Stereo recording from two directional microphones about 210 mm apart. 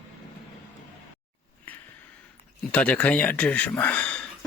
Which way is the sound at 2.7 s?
5° left (ahead or behind).